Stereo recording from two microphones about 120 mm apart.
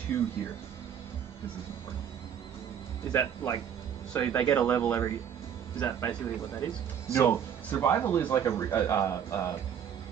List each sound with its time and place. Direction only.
0.1 s speech: 20° left (ahead or behind)
3.1 s speech: 30° left (ahead or behind)